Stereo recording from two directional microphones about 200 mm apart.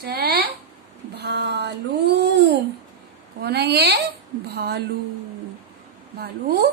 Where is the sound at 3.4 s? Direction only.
55° right (ahead or behind).